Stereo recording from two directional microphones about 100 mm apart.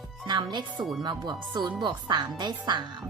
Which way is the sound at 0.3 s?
50° right (ahead or behind).